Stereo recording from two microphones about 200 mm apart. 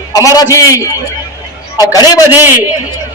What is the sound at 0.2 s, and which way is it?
Speech, 15° left (ahead or behind).